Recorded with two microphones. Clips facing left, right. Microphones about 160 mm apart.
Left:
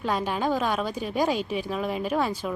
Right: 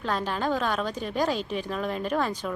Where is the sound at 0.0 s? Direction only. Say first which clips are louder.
Left 2 dB; 10° left (ahead or behind).